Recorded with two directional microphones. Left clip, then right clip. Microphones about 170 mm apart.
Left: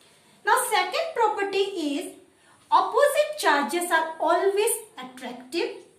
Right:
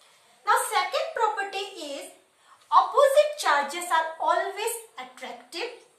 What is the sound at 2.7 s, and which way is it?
A woman's voice, 40° left (ahead or behind).